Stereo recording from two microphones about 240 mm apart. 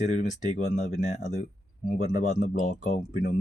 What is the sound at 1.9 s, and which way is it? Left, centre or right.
Speech, left.